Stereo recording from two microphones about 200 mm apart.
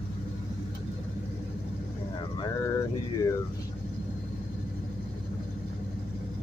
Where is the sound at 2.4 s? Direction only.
15° left (ahead or behind).